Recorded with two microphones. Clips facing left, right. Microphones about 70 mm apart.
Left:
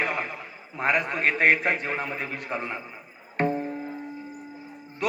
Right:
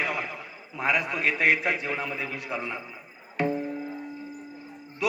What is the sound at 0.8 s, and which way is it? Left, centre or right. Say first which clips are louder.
A man's voice: left 2 dB; left.